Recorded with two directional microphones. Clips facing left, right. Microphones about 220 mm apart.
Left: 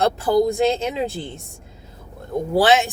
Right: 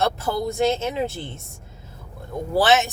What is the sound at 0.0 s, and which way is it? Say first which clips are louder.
Speech: left 6 dB; 15° left (ahead or behind).